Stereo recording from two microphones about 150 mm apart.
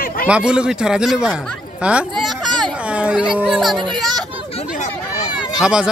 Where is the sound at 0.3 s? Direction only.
5° right (ahead or behind).